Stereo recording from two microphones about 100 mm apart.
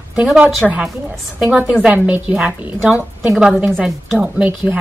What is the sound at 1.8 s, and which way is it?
A woman's voice, 15° right (ahead or behind).